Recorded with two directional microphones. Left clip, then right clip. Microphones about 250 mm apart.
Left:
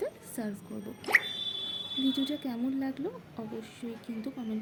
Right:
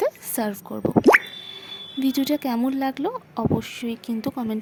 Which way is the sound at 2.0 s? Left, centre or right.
Right.